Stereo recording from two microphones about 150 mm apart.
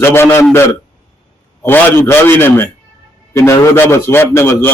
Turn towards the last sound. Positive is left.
turn(degrees=15)  # may be behind; listen again after turning